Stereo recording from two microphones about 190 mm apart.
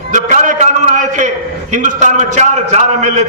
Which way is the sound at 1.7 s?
40° right (ahead or behind).